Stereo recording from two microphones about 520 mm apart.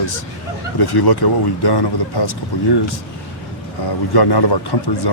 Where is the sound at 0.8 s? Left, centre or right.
Left.